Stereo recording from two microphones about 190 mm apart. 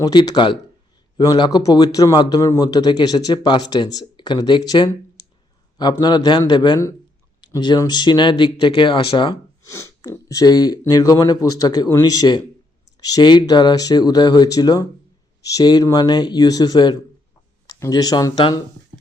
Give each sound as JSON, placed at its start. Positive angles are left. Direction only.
{"t": 0.0, "sound": "speech", "side_deg": 20}